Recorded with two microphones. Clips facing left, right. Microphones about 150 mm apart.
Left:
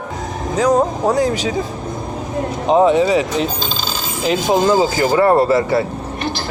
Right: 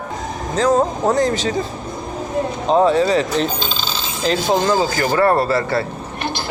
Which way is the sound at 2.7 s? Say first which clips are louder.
Left 2 dB; 15° left (ahead or behind).